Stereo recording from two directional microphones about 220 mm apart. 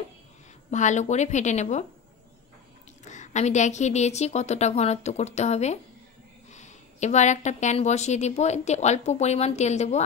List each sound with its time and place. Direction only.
0.7 s a woman's voice: 35° left (ahead or behind)
3.1 s a woman's voice: 30° left (ahead or behind)